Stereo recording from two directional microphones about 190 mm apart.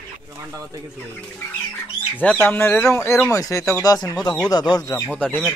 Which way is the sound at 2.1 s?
10° left (ahead or behind).